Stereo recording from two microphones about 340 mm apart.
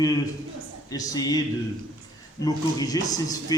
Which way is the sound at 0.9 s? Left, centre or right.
Centre.